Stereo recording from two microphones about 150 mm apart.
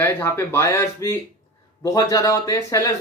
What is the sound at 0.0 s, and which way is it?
Speech, 15° left (ahead or behind).